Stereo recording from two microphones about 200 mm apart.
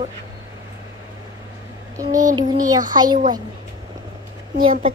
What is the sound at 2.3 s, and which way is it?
Speech, 20° right (ahead or behind).